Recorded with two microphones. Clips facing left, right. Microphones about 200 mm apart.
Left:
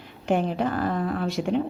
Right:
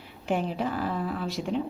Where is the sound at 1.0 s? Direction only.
60° left (ahead or behind).